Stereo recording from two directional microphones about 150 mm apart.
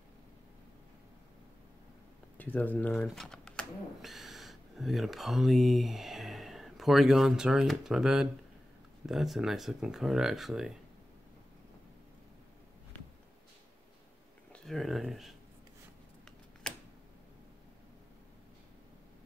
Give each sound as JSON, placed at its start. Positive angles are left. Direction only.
{"t": 2.3, "sound": "speech", "side_deg": 10}
{"t": 14.5, "sound": "speech", "side_deg": 0}
{"t": 16.6, "sound": "a sound", "side_deg": 5}